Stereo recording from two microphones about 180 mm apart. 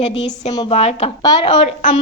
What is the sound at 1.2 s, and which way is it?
Speech, 25° left (ahead or behind).